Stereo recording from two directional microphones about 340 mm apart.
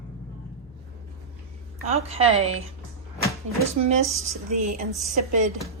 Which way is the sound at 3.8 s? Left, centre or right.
Centre.